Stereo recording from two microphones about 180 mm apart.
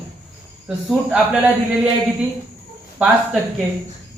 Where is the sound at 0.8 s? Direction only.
5° right (ahead or behind).